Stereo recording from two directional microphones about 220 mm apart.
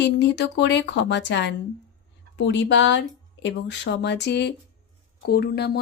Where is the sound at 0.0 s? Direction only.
50° left (ahead or behind).